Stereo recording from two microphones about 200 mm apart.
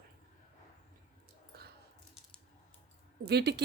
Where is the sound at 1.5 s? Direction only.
50° right (ahead or behind).